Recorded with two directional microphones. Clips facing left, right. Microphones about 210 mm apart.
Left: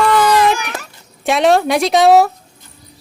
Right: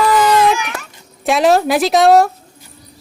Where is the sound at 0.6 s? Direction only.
40° left (ahead or behind).